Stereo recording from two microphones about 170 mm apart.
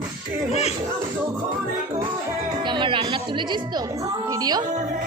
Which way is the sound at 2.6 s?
30° right (ahead or behind).